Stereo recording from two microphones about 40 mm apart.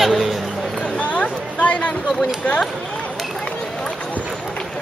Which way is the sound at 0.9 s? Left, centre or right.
Left.